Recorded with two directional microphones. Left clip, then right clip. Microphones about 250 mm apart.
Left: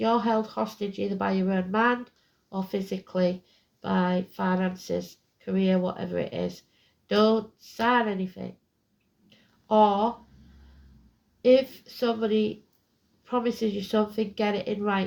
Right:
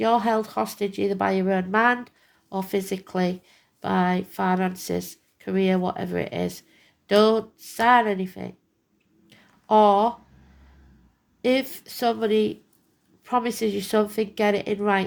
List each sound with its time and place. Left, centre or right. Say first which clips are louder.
0.0 s speech: right 3 dB; right
9.3 s a sound: right 4 dB; right
11.4 s speech: left 3 dB; right